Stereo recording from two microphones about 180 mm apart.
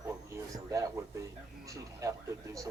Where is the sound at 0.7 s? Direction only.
15° right (ahead or behind).